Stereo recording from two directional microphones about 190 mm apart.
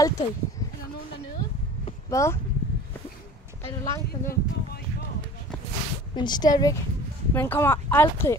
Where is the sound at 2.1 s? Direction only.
15° left (ahead or behind).